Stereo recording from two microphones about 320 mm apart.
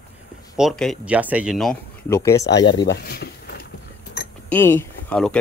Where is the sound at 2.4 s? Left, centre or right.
Left.